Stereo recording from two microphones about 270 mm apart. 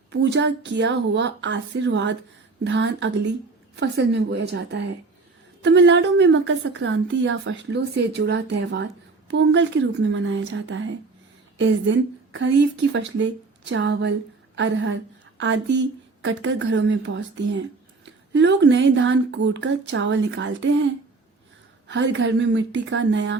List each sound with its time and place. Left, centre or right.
0.1 s a woman's voice: right
16.2 s speech: right
21.8 s speech: right